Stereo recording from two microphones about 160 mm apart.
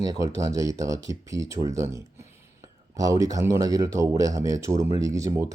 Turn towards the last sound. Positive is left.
turn(degrees=-20)  # may be behind; listen again after turning